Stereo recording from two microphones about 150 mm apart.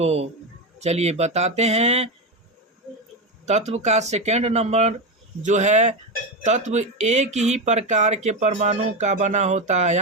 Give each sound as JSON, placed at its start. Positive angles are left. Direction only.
{"t": 0.0, "sound": "speech", "side_deg": -45}
{"t": 3.4, "sound": "speech", "side_deg": -50}